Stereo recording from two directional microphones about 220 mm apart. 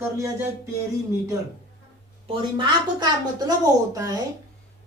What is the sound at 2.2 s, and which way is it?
A woman's voice, 20° right (ahead or behind).